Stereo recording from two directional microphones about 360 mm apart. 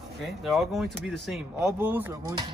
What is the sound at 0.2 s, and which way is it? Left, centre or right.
Speech, centre.